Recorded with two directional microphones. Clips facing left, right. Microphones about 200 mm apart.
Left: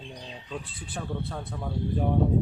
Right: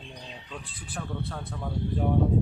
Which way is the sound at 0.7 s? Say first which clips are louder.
Left 1 dB; 25° left (ahead or behind).